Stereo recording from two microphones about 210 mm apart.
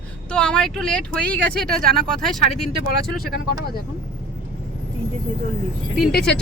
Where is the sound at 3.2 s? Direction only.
45° left (ahead or behind).